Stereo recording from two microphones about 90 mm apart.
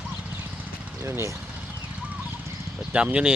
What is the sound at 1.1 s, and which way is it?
Speech, 30° right (ahead or behind).